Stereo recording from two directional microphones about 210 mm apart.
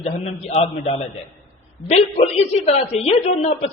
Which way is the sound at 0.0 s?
30° left (ahead or behind).